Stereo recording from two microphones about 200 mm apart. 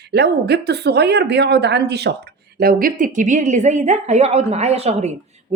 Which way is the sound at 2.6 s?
45° right (ahead or behind).